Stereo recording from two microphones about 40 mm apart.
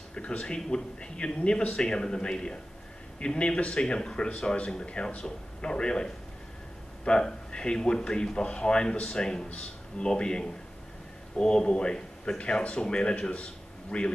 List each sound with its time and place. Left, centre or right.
0.1 s speech: left; by 12.4 s centre
12.6 s a man's voice: left